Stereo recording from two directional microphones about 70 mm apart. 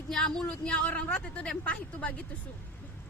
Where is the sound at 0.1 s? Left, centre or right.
Centre.